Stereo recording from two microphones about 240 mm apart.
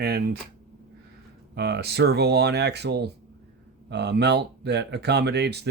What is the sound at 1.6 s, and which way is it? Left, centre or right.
Speech, right.